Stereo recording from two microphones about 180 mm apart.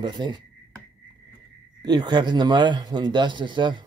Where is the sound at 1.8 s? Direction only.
25° right (ahead or behind).